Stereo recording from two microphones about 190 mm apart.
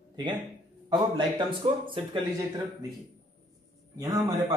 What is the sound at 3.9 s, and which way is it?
Speech, 20° right (ahead or behind).